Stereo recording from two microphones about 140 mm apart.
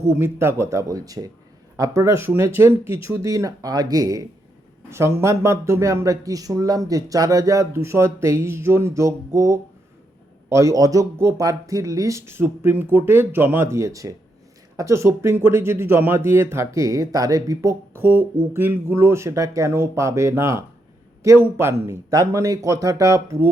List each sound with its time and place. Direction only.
0.0 s speech: 15° right (ahead or behind)